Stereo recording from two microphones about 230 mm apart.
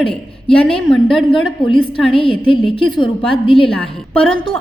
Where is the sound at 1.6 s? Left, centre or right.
Left.